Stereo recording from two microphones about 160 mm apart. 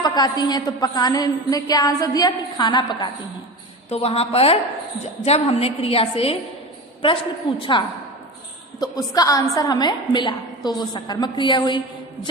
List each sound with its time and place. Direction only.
0.0 s a woman's voice: 25° left (ahead or behind)
3.8 s a woman's voice: 40° left (ahead or behind)
7.6 s a woman's voice: 30° left (ahead or behind)